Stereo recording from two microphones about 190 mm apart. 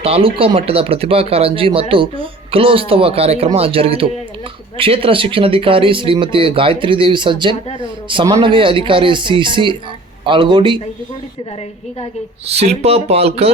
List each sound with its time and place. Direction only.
0.0 s speech: 30° right (ahead or behind)
12.5 s speech: 35° right (ahead or behind)